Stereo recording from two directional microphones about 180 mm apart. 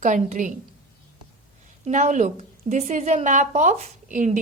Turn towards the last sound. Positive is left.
turn(degrees=-45)  # may be behind; listen again after turning